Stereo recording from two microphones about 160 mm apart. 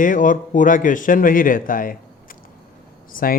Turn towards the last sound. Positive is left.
turn(degrees=60)  # may be behind; listen again after turning